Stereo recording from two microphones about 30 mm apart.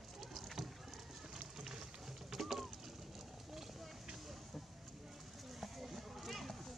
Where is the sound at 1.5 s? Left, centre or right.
Centre.